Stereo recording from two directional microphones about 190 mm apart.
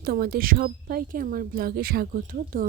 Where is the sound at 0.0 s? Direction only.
55° right (ahead or behind).